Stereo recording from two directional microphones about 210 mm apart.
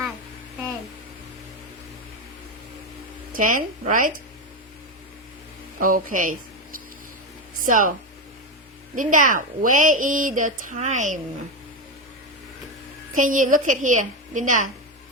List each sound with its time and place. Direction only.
3.3 s speech: 40° right (ahead or behind)
5.8 s speech: 40° right (ahead or behind)
7.6 s speech: 40° right (ahead or behind)
9.0 s speech: 40° right (ahead or behind)
13.1 s speech: 40° right (ahead or behind)